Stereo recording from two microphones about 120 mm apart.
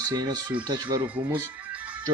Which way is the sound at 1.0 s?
15° right (ahead or behind).